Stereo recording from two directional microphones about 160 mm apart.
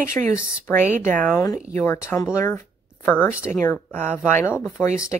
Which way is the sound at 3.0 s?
10° left (ahead or behind).